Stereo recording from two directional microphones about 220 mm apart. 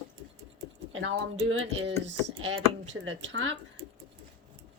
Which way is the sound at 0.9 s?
60° right (ahead or behind).